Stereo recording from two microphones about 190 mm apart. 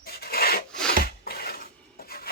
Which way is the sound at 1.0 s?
55° left (ahead or behind).